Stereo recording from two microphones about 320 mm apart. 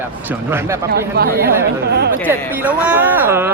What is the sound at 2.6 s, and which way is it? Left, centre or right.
Speech, centre.